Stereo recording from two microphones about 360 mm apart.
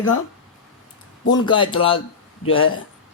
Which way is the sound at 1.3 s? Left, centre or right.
Centre.